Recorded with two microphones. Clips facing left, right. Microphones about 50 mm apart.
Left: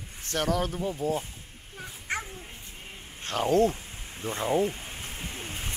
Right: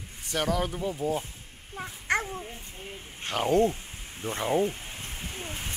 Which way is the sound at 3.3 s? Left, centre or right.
Centre.